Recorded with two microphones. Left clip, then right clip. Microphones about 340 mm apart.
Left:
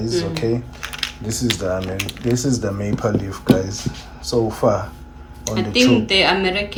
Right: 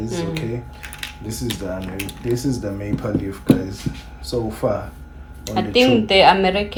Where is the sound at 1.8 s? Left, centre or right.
Centre.